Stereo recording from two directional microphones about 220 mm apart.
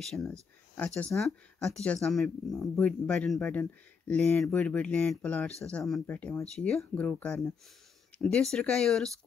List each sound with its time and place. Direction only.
0.0 s speech: centre (ahead or behind)